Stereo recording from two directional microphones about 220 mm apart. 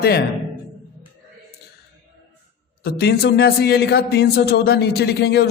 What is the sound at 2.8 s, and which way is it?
A man's voice, 45° left (ahead or behind).